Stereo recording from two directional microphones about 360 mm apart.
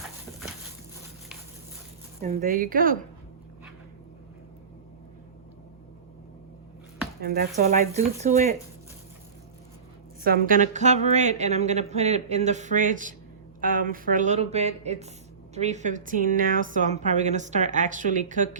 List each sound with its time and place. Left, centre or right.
2.2 s speech: right
7.2 s speech: right
10.2 s speech: right